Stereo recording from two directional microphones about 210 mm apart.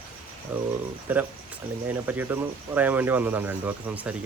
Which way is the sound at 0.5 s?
10° right (ahead or behind).